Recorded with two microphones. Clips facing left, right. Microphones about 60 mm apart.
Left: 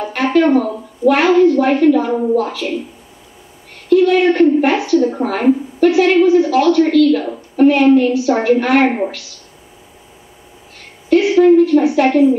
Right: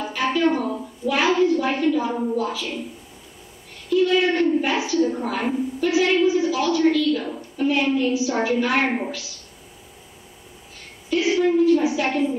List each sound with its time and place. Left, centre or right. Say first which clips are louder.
0.0 s a woman's voice: left 7 dB; left
3.7 s a woman's voice: left 8 dB; left
11.1 s a woman's voice: left 10 dB; left